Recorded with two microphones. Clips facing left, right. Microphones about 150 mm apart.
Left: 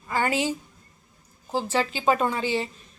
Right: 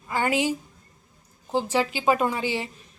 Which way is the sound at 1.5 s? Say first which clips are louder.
Right 1 dB; 15° right (ahead or behind).